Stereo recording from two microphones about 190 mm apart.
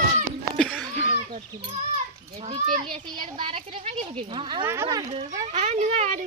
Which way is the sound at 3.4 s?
30° right (ahead or behind).